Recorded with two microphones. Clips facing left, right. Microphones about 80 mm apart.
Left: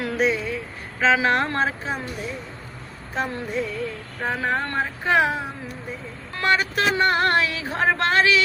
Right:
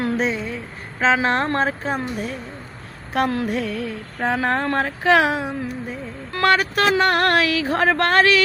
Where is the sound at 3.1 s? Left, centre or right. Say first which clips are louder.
Right 5 dB; right.